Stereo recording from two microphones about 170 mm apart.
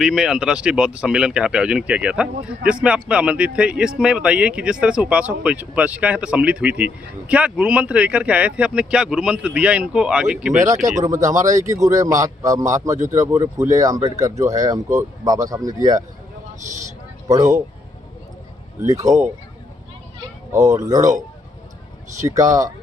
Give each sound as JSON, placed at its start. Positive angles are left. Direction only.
{"t": 0.0, "sound": "speech", "side_deg": -5}
{"t": 11.0, "sound": "speech", "side_deg": -20}
{"t": 17.2, "sound": "speech", "side_deg": -20}
{"t": 18.8, "sound": "speech", "side_deg": -20}
{"t": 20.5, "sound": "speech", "side_deg": -20}
{"t": 22.3, "sound": "speech", "side_deg": -20}